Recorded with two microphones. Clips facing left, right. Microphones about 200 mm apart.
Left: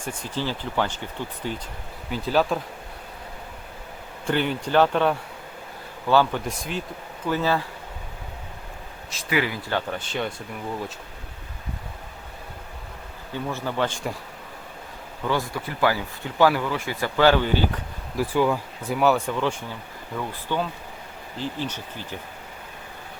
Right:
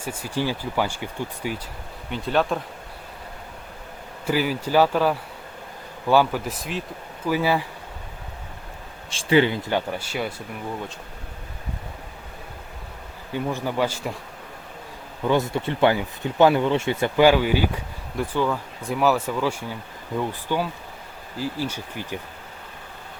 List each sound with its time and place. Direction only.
0.0 s speech: 5° right (ahead or behind)
2.0 s speech: centre (ahead or behind)
4.3 s speech: 5° right (ahead or behind)
9.0 s speech: 30° right (ahead or behind)
9.6 s speech: 10° right (ahead or behind)
13.3 s speech: 15° right (ahead or behind)
15.2 s speech: 20° right (ahead or behind)
18.2 s speech: 10° left (ahead or behind); by 22.2 s 10° right (ahead or behind)